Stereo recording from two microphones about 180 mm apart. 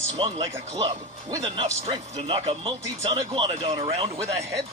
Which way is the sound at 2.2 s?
30° right (ahead or behind).